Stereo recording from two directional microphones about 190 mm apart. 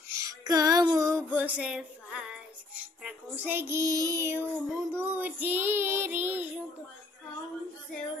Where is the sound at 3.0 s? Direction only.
5° right (ahead or behind).